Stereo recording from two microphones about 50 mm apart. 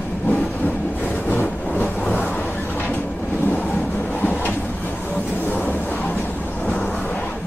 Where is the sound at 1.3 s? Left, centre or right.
Left.